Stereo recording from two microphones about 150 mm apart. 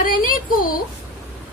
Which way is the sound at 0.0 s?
70° left (ahead or behind).